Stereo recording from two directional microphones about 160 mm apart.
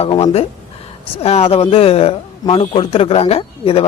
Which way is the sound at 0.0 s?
40° left (ahead or behind).